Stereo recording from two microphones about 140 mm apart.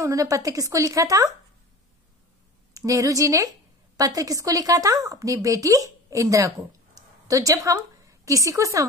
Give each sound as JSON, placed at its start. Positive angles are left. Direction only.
{"t": 0.0, "sound": "speech", "side_deg": -25}
{"t": 2.7, "sound": "a woman's voice", "side_deg": -25}